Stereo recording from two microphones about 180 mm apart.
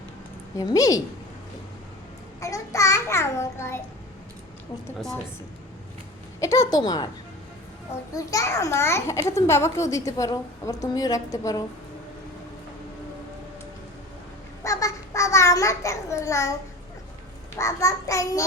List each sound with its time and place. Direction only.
0.5 s a woman's voice: 20° left (ahead or behind)
2.4 s a child's voice: 15° left (ahead or behind)
4.9 s a woman's voice: centre (ahead or behind)
6.4 s a woman's voice: 20° left (ahead or behind)
8.1 s a child's voice: 20° left (ahead or behind)
14.6 s child singing: 20° left (ahead or behind)
17.6 s a child's voice: 15° left (ahead or behind)